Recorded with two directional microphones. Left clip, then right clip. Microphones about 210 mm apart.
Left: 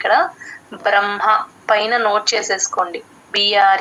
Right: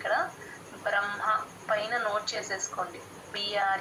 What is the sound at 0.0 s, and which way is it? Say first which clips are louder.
A woman's voice: left 14 dB; 45° left (ahead or behind).